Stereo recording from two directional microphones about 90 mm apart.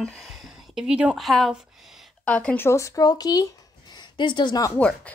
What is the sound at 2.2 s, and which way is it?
Speech, 10° left (ahead or behind).